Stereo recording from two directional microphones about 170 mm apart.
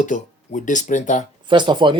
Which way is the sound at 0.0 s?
50° left (ahead or behind).